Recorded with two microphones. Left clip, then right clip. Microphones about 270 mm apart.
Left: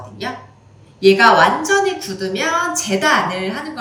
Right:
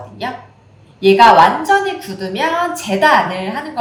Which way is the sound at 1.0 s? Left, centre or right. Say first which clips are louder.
Right 3 dB; centre.